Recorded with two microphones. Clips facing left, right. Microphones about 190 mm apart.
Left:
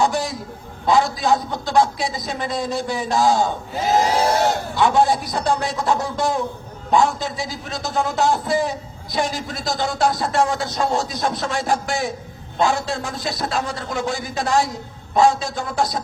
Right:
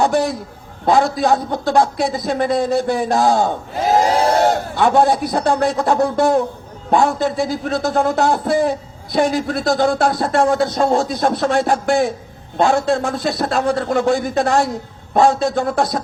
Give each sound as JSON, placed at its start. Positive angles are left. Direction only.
{"t": 0.0, "sound": "speech", "side_deg": -60}